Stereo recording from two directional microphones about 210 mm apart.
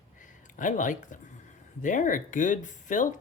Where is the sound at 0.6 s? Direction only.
40° left (ahead or behind).